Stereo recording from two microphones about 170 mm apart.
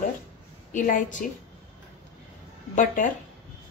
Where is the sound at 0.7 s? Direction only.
50° left (ahead or behind).